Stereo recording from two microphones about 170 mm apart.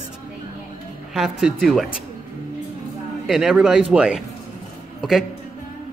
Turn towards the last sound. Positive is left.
turn(degrees=0)  # may be behind; listen again after turning